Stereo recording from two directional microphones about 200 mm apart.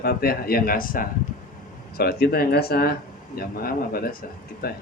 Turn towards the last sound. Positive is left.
turn(degrees=50)  # may be behind; listen again after turning